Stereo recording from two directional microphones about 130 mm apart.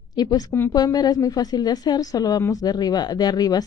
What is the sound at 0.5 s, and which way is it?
Speech, 15° left (ahead or behind).